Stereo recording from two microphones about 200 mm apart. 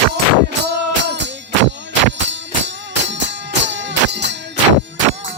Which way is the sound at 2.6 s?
65° right (ahead or behind).